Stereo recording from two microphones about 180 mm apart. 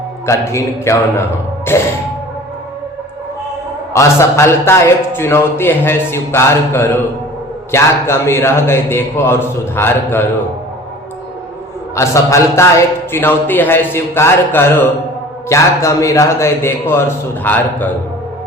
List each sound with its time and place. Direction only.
0.3 s a man's voice: 15° left (ahead or behind)
3.9 s a man's voice: 15° left (ahead or behind)
11.9 s a man's voice: 15° left (ahead or behind)